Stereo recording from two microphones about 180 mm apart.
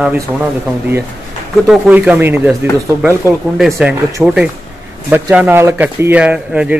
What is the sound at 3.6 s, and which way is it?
Speech, centre (ahead or behind).